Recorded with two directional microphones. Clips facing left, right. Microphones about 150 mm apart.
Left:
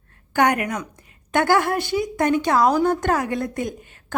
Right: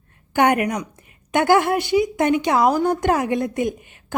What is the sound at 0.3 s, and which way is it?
A woman's voice, 20° right (ahead or behind).